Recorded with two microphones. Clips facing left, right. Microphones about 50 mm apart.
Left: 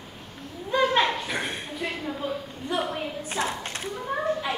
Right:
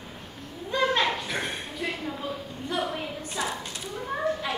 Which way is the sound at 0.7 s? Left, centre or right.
Centre.